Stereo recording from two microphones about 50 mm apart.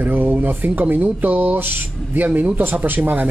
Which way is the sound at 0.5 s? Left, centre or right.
Right.